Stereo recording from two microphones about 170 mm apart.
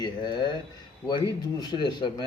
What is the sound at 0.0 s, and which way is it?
Speech, 25° left (ahead or behind).